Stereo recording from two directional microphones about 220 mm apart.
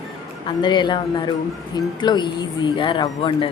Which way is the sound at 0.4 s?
20° left (ahead or behind).